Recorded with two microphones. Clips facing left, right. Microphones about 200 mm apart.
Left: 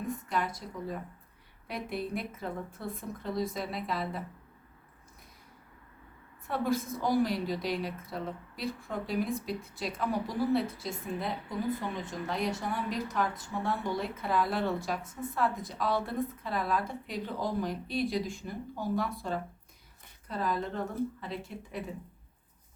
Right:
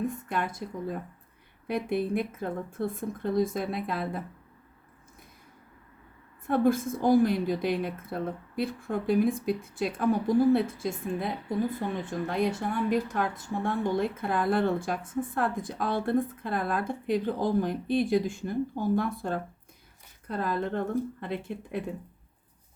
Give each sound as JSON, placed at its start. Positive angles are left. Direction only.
{"t": 0.3, "sound": "a sound", "side_deg": -55}
{"t": 1.6, "sound": "a woman's voice", "side_deg": -55}
{"t": 6.5, "sound": "a woman's voice", "side_deg": -50}